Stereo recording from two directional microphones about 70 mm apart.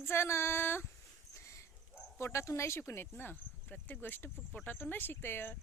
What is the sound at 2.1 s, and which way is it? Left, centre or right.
Speech, left.